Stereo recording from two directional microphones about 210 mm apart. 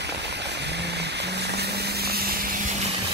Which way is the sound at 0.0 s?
55° right (ahead or behind).